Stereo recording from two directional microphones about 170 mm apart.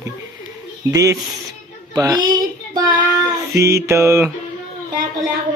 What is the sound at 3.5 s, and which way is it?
Mantra, 15° right (ahead or behind).